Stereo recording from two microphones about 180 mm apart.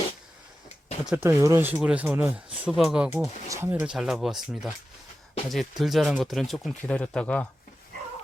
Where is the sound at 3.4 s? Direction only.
15° right (ahead or behind); by 7.4 s 5° left (ahead or behind).